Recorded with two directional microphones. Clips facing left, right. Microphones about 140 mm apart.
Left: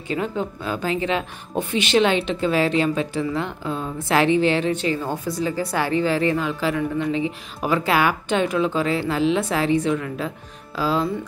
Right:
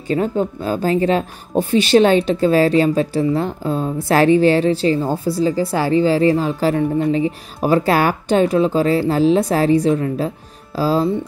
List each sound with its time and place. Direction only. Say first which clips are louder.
0.1 s a woman's voice: right 7 dB; 40° right (ahead or behind)